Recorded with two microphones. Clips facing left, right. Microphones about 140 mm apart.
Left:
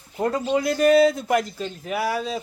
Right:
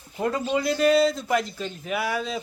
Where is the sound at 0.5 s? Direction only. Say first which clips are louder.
Left 3 dB; 45° left (ahead or behind).